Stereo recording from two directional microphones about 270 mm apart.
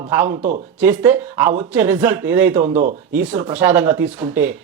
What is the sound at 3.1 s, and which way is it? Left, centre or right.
Speech, centre.